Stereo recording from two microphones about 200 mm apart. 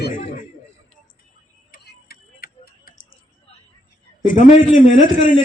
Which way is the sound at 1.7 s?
50° left (ahead or behind).